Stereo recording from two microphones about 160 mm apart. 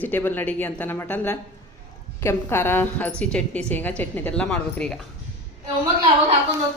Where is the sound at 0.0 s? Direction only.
10° left (ahead or behind).